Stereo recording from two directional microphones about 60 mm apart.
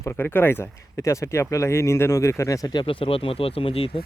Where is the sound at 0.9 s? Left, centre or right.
Left.